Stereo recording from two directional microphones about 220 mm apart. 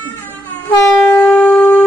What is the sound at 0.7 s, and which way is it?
Train, 10° left (ahead or behind).